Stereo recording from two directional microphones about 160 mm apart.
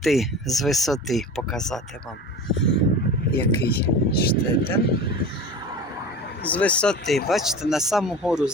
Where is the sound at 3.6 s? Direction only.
75° left (ahead or behind).